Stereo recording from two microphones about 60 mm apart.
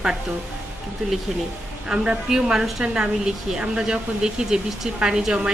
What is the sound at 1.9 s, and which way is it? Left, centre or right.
Speech, centre.